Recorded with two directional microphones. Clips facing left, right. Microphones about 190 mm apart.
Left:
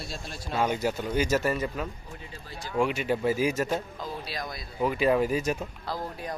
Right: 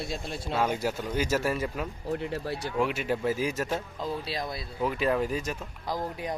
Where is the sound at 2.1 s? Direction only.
70° right (ahead or behind).